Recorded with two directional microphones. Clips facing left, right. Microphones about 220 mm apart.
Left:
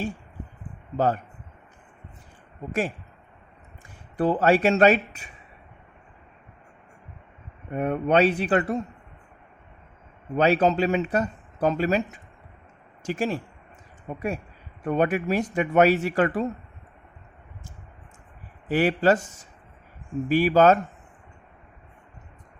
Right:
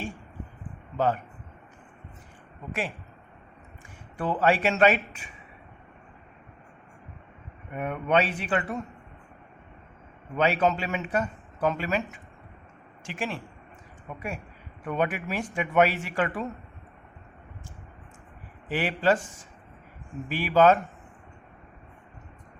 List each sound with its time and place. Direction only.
0.9 s speech: 40° left (ahead or behind)
4.2 s speech: 40° left (ahead or behind)
7.7 s speech: 35° left (ahead or behind)
10.3 s speech: 40° left (ahead or behind)
14.8 s speech: 40° left (ahead or behind)
18.7 s speech: 45° left (ahead or behind)
20.2 s speech: 40° left (ahead or behind)